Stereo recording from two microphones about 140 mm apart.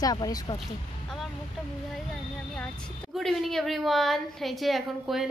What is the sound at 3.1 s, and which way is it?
A woman's voice, centre (ahead or behind).